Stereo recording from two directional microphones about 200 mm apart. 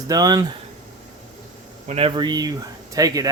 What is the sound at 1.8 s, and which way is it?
Speech, 30° right (ahead or behind).